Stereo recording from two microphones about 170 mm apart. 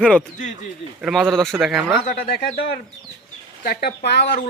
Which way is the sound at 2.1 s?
65° left (ahead or behind).